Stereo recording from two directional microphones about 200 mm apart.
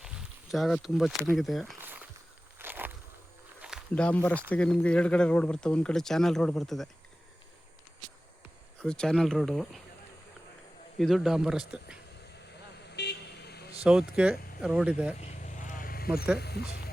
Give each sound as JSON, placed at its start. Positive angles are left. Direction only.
{"t": 0.0, "sound": "a sound", "side_deg": 0}
{"t": 1.4, "sound": "speech", "side_deg": 0}
{"t": 2.6, "sound": "a sound", "side_deg": -10}
{"t": 4.5, "sound": "speech", "side_deg": 5}
{"t": 8.8, "sound": "speech", "side_deg": 5}
{"t": 10.9, "sound": "speech", "side_deg": 0}
{"t": 13.0, "sound": "vehicle", "side_deg": 55}
{"t": 13.8, "sound": "speech", "side_deg": -5}
{"t": 15.3, "sound": "vehicle", "side_deg": 40}
{"t": 16.4, "sound": "speech", "side_deg": 55}